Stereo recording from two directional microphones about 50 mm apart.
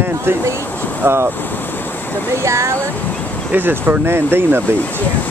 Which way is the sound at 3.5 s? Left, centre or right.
Right.